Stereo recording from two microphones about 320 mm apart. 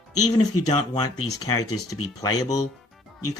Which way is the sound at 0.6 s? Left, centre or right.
Centre.